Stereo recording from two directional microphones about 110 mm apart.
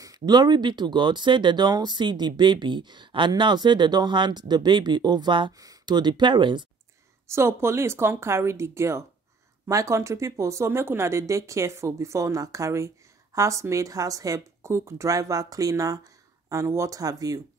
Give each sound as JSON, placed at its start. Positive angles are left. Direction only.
{"t": 0.0, "sound": "speech", "side_deg": -35}
{"t": 5.5, "sound": "speech", "side_deg": -35}
{"t": 7.2, "sound": "speech", "side_deg": -25}